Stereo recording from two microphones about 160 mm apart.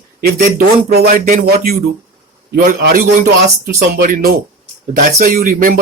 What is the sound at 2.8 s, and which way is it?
Speech, 70° right (ahead or behind).